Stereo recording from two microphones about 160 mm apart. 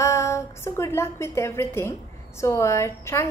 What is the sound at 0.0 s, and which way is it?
A woman's voice, 20° left (ahead or behind).